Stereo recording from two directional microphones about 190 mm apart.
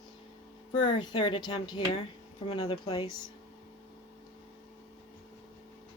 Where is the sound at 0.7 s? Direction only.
25° left (ahead or behind).